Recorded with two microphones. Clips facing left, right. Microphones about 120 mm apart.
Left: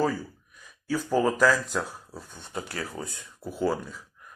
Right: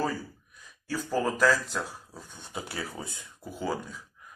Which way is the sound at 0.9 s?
10° left (ahead or behind).